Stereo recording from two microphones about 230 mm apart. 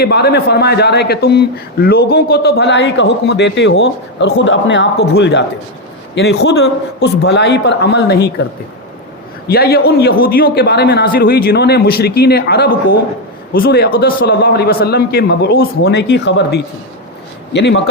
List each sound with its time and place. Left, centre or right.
0.0 s a man's voice: left
9.5 s a man's voice: left